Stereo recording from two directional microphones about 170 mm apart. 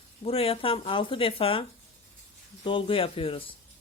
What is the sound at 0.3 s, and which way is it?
Speech, 35° left (ahead or behind).